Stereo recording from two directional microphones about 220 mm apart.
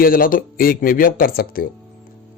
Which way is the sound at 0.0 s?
40° left (ahead or behind).